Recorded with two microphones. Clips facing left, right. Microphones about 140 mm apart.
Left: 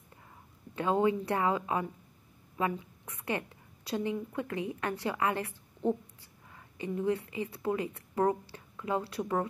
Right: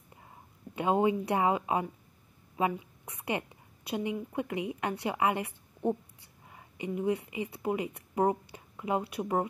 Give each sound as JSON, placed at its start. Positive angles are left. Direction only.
{"t": 0.7, "sound": "a woman's voice", "side_deg": -15}